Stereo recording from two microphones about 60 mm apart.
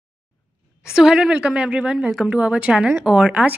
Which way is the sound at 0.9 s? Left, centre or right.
Centre.